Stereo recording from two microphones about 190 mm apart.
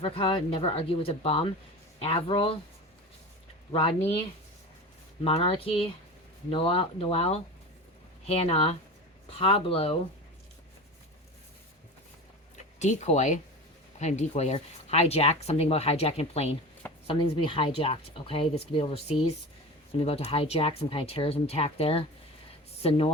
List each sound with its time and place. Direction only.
0.0 s speech: 30° left (ahead or behind)
3.7 s speech: 30° left (ahead or behind)
5.2 s speech: 30° left (ahead or behind)
12.8 s speech: 40° left (ahead or behind)